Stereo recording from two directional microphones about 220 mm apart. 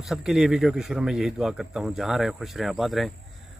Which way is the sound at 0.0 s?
Centre (ahead or behind).